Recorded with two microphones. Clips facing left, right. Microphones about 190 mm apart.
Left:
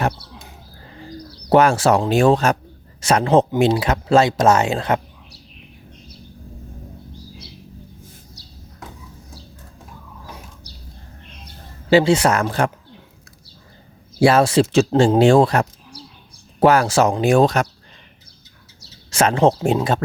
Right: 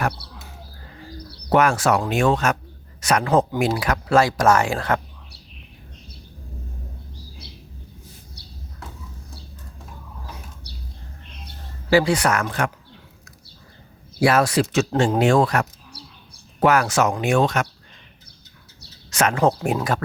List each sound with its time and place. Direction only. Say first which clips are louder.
1.5 s speech: left 4 dB; 30° left (ahead or behind)
11.9 s speech: left 4 dB; 25° left (ahead or behind)
14.2 s speech: left 4 dB; 30° left (ahead or behind)
19.1 s speech: left 3 dB; 30° left (ahead or behind)